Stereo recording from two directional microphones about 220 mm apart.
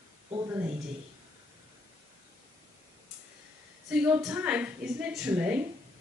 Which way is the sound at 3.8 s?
5° right (ahead or behind).